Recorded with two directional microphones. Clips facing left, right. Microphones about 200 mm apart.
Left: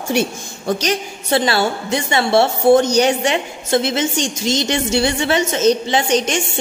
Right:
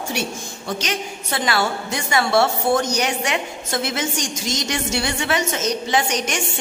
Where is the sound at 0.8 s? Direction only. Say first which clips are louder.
Left 5 dB; 35° left (ahead or behind).